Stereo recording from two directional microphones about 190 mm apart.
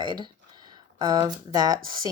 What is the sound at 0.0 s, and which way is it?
Speech, 25° right (ahead or behind).